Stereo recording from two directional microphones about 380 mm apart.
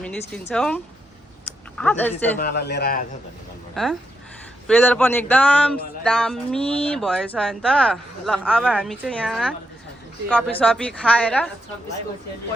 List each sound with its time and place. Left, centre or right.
0.0 s speech: centre
1.8 s speech: centre
2.4 s speech: left
3.8 s speech: centre